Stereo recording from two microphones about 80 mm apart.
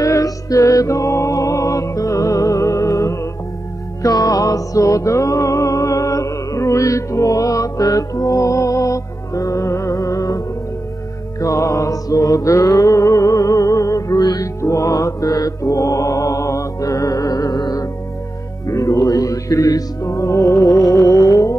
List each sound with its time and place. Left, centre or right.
0.0 s music: left
18.7 s music: left